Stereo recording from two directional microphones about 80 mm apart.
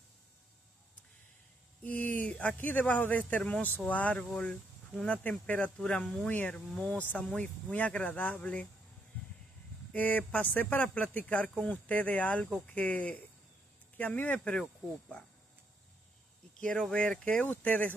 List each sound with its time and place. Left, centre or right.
1.8 s speech: centre
9.9 s speech: left
16.5 s speech: centre